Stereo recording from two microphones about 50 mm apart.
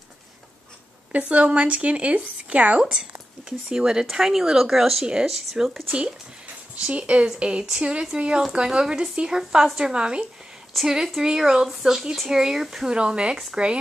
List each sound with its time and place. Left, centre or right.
1.1 s speech: right
2.8 s speech: centre
6.7 s speech: right
10.7 s speech: centre
11.2 s speech: centre
12.9 s speech: centre